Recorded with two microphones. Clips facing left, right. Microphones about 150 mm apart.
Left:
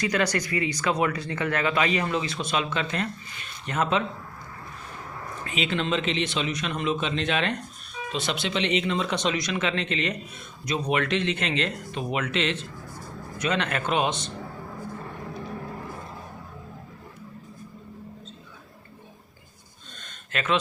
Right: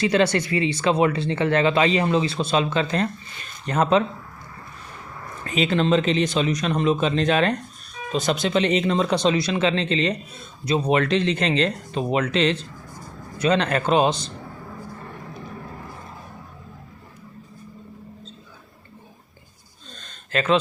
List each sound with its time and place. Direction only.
0.0 s speech: 25° right (ahead or behind)
5.5 s a man's voice: 40° right (ahead or behind)
20.0 s a sound: 35° right (ahead or behind)